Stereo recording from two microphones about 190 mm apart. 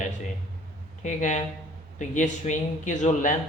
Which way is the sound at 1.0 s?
40° left (ahead or behind).